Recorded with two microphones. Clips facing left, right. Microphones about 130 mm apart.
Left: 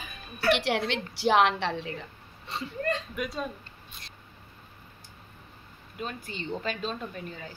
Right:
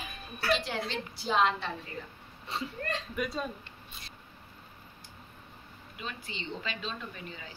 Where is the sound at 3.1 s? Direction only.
Centre (ahead or behind).